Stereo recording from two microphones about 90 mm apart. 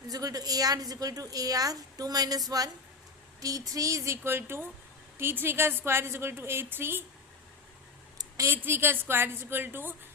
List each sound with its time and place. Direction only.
0.1 s a woman's voice: 45° right (ahead or behind)
3.7 s a woman's voice: 40° right (ahead or behind)
8.4 s a woman's voice: 25° right (ahead or behind)